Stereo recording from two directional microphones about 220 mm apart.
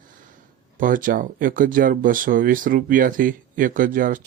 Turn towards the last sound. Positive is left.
turn(degrees=-40)  # may be behind; listen again after turning